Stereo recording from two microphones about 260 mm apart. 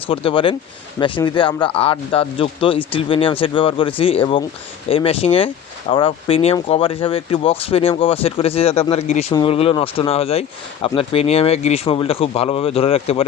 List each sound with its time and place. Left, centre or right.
0.1 s speech: centre